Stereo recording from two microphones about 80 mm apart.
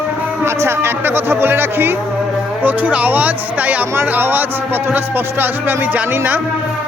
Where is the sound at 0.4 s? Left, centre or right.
Right.